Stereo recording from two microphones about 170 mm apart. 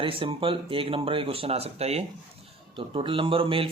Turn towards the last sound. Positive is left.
turn(degrees=-30)  # may be behind; listen again after turning